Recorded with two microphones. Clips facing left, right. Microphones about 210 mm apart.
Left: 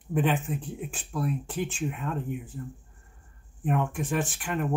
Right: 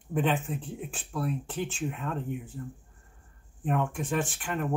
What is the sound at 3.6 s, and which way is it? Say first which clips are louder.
Speech: left 1 dB; 15° left (ahead or behind).